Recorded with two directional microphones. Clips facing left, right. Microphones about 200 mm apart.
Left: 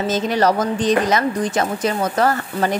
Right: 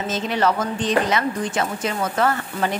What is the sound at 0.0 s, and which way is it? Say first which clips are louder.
A woman's voice: left 4 dB; 40° left (ahead or behind).